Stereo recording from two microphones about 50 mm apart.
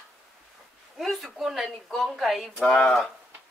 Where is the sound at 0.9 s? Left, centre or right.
Centre.